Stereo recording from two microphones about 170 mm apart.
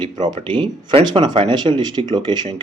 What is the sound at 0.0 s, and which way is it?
Speech, 25° right (ahead or behind).